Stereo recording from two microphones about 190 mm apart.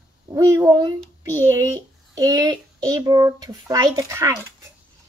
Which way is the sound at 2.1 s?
20° right (ahead or behind).